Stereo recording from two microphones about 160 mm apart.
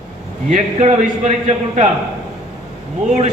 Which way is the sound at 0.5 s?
45° right (ahead or behind).